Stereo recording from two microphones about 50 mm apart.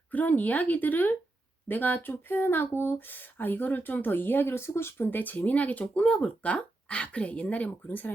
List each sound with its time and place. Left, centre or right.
0.1 s speech: left